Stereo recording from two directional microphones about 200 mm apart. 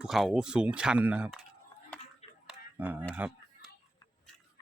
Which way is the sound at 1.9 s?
5° left (ahead or behind).